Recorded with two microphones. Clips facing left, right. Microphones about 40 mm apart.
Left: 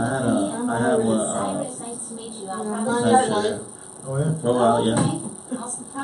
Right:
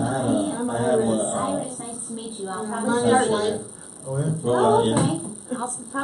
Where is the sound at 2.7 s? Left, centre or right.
Centre.